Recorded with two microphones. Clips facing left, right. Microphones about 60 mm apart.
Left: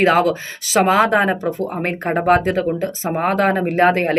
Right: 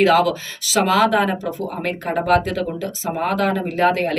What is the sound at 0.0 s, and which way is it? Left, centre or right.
Speech, left.